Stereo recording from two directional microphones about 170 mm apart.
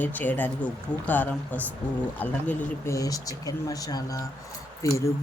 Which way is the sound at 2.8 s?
20° left (ahead or behind).